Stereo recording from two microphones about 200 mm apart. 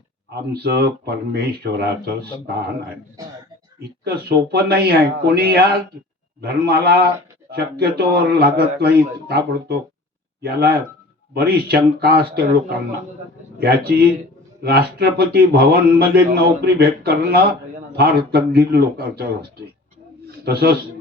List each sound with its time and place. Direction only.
0.5 s speech: 55° right (ahead or behind)
4.0 s speech: 55° right (ahead or behind)
20.2 s a sound: 50° right (ahead or behind)